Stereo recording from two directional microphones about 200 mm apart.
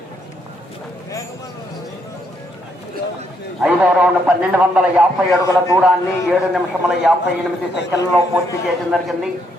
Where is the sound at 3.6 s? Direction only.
5° right (ahead or behind).